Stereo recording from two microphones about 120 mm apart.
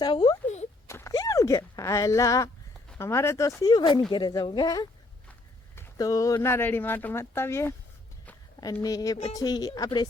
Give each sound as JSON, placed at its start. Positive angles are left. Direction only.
{"t": 0.0, "sound": "speech", "side_deg": 35}
{"t": 0.4, "sound": "a sound", "side_deg": 70}
{"t": 0.9, "sound": "a sound", "side_deg": 25}
{"t": 3.0, "sound": "speech", "side_deg": 20}
{"t": 3.6, "sound": "speech", "side_deg": 35}
{"t": 6.0, "sound": "speech", "side_deg": 30}
{"t": 8.8, "sound": "speech", "side_deg": 30}